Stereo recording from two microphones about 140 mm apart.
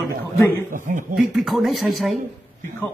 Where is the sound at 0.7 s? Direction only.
65° right (ahead or behind).